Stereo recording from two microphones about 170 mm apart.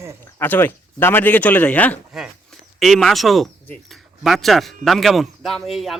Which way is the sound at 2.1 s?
Centre (ahead or behind).